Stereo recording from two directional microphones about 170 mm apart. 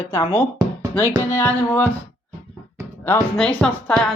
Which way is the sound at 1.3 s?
15° left (ahead or behind).